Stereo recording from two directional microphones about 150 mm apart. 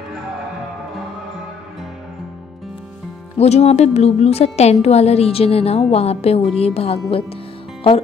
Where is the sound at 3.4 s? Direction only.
45° left (ahead or behind).